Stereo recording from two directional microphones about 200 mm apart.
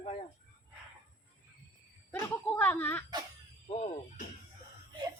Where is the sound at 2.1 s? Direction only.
10° left (ahead or behind).